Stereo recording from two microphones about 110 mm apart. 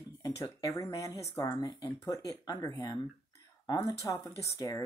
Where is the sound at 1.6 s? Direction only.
40° left (ahead or behind).